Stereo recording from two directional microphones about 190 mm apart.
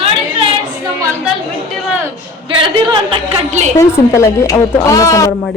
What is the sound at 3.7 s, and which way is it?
A woman's voice, 15° left (ahead or behind).